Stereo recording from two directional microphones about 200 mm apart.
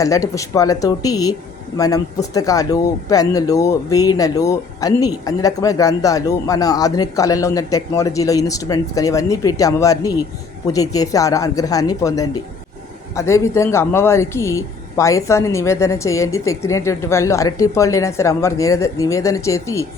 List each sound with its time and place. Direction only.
0.0 s speech: 15° left (ahead or behind)